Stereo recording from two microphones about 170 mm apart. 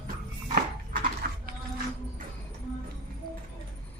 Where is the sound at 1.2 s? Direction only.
60° right (ahead or behind).